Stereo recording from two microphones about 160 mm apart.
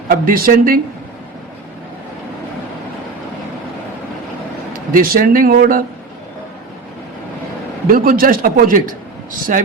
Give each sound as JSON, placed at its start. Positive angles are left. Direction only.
{"t": 0.1, "sound": "speech", "side_deg": -65}
{"t": 4.7, "sound": "speech", "side_deg": -60}
{"t": 7.9, "sound": "speech", "side_deg": -60}